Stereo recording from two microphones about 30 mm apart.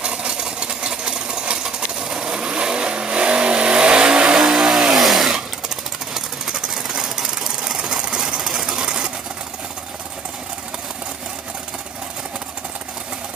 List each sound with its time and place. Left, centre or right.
0.0 s engine: right
1.0 s sewing machine: right
1.6 s coin: centre
2.4 s vehicle: right
4.4 s vehicle: centre
5.0 s chainsaw: centre
7.6 s engine: right
8.1 s sewing machine: right
8.4 s sewing machine: centre